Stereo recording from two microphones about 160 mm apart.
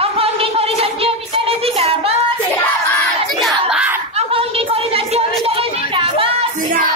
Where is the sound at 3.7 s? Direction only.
10° right (ahead or behind).